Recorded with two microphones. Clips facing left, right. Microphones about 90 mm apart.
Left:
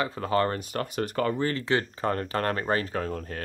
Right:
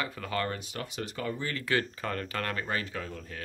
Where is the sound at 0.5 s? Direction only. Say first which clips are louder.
Left 7 dB; 50° left (ahead or behind).